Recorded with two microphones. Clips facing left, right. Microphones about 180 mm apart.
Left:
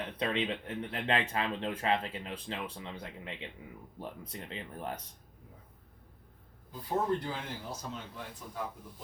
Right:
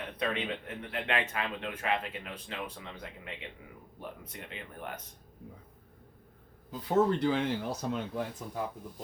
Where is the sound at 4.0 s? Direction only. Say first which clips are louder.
Left 1 dB; 30° left (ahead or behind).